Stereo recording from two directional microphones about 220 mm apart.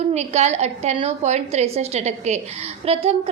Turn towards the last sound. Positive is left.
turn(degrees=-30)  # may be behind; listen again after turning